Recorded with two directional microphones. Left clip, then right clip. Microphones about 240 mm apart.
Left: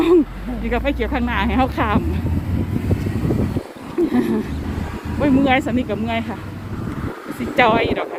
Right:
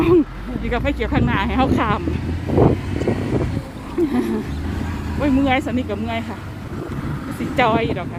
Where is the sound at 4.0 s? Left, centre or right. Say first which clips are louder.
Left 1 dB; centre.